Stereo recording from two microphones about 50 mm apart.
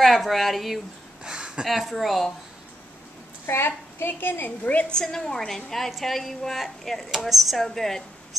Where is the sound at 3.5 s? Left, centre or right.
Left.